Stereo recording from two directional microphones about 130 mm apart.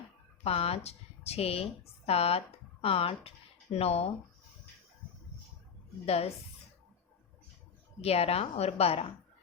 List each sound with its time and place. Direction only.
0.4 s speech: 50° left (ahead or behind)
6.1 s speech: 55° left (ahead or behind)
8.0 s speech: 50° left (ahead or behind)